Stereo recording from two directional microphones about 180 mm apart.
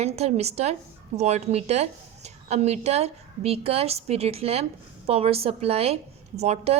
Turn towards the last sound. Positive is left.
turn(degrees=-35)  # may be behind; listen again after turning